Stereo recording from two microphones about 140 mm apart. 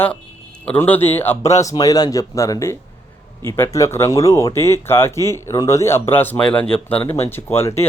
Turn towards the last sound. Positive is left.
turn(degrees=20)  # may be behind; listen again after turning